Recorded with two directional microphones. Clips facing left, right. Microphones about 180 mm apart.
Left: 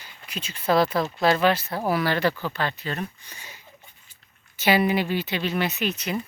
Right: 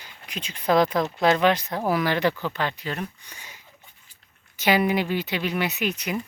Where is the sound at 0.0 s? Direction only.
15° right (ahead or behind).